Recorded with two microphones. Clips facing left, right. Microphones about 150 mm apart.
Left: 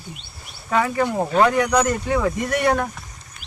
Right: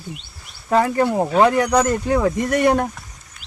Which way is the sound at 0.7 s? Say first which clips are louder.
Right 3 dB; 40° right (ahead or behind).